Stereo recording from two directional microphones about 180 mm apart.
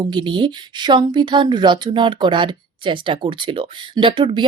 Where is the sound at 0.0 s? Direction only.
25° right (ahead or behind).